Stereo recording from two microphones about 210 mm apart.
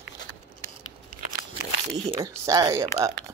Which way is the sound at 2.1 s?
15° right (ahead or behind).